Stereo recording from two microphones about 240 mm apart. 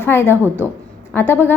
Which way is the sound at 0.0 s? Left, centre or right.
Centre.